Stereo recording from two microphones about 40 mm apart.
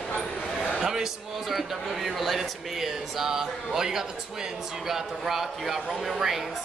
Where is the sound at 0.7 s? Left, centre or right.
Centre.